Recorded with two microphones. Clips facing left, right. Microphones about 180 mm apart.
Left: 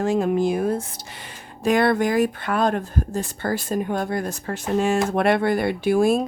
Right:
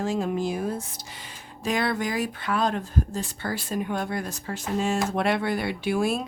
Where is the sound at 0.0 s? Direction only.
60° left (ahead or behind).